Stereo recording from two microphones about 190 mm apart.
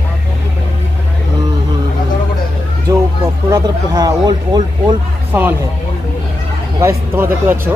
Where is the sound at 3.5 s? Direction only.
20° right (ahead or behind).